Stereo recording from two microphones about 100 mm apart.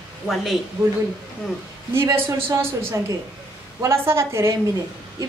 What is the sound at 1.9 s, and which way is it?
A woman's voice, 25° right (ahead or behind).